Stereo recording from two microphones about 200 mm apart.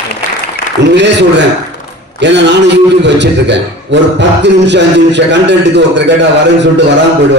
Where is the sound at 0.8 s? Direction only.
60° right (ahead or behind).